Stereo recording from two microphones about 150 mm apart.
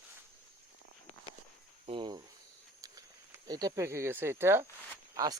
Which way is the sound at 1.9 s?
30° right (ahead or behind).